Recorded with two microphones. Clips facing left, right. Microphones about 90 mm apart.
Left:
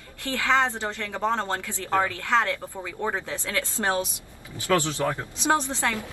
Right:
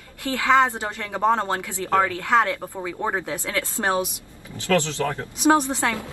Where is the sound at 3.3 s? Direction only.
20° right (ahead or behind).